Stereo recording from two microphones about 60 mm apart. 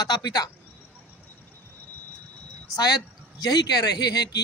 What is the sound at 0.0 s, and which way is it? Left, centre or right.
Speech, left.